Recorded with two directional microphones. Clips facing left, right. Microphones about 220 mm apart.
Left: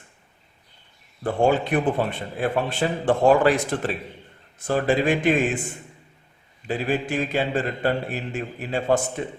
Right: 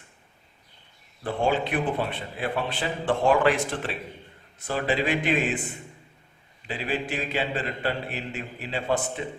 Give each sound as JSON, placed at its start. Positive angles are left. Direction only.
{"t": 1.2, "sound": "a man's voice", "side_deg": 45}
{"t": 6.7, "sound": "a man's voice", "side_deg": 45}